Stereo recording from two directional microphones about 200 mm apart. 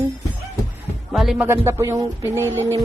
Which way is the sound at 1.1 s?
Centre (ahead or behind).